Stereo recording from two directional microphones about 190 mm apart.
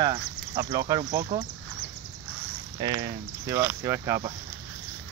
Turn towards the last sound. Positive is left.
turn(degrees=-15)  # may be behind; listen again after turning